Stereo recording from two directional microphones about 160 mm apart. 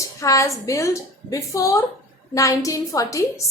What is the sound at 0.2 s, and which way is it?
A woman's voice, 20° left (ahead or behind).